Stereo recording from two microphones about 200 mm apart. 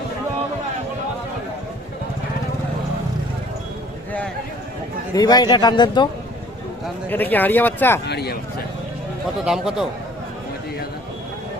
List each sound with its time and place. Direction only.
5.1 s a man's voice: 20° left (ahead or behind)
7.1 s speech: 10° left (ahead or behind)
8.0 s speech: 55° left (ahead or behind)
9.4 s speech: centre (ahead or behind)